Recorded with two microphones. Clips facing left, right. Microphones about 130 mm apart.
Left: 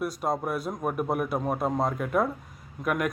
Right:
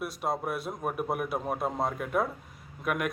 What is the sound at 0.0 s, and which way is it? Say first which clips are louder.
A man's voice: left 3 dB; centre (ahead or behind).